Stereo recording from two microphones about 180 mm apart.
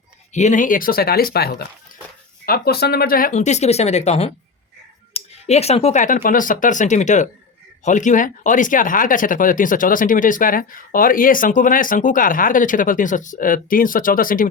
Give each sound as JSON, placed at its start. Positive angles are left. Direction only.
{"t": 0.3, "sound": "speech", "side_deg": 45}